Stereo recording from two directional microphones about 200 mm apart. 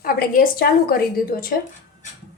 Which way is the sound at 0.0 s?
45° left (ahead or behind).